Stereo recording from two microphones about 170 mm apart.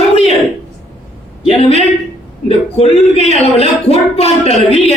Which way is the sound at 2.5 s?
35° left (ahead or behind).